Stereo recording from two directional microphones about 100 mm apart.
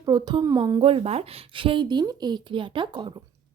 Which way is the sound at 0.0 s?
40° right (ahead or behind).